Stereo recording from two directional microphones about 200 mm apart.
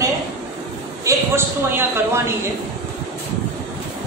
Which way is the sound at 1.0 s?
10° right (ahead or behind).